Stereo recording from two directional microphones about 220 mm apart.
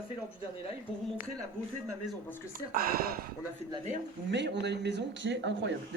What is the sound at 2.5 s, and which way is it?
Speech, 40° right (ahead or behind).